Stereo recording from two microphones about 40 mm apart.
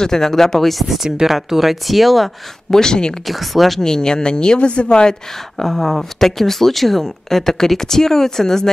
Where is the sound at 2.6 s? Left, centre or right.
Centre.